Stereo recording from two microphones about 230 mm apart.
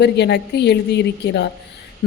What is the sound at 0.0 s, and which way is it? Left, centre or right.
Speech, left.